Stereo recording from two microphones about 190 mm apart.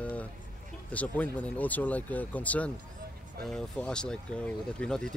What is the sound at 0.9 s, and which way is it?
Speech, 10° left (ahead or behind).